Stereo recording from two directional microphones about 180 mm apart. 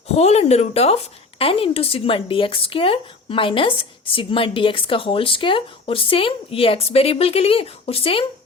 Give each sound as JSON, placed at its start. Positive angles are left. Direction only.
{"t": 0.2, "sound": "speech", "side_deg": 35}